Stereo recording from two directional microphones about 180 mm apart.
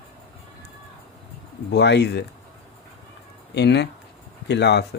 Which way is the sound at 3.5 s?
70° left (ahead or behind).